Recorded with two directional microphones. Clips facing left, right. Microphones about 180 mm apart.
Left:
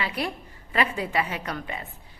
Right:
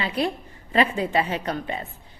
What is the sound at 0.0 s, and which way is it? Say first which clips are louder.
A woman's voice: right 4 dB; 25° right (ahead or behind).